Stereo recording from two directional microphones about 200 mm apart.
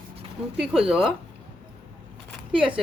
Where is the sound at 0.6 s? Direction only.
Centre (ahead or behind).